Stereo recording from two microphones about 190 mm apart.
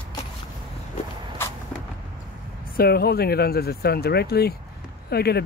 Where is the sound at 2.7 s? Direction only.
55° left (ahead or behind).